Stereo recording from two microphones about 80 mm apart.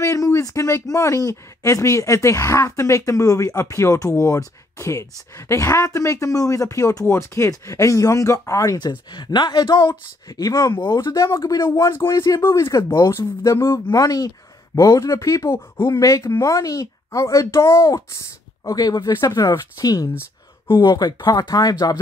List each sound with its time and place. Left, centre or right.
0.0 s speech: left
8.7 s speech: left
10.3 s speech: left
10.8 s speech: left
11.1 s speech: left
11.6 s speech: left
13.9 s speech: left
20.6 s speech: left
20.9 s speech: left